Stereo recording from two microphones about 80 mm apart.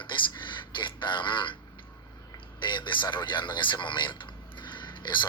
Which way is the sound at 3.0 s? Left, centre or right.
Left.